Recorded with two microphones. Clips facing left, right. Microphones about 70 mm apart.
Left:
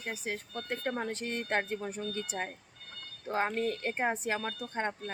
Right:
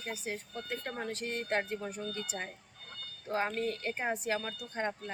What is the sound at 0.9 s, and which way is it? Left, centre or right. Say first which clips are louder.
Speech: left 3 dB; left.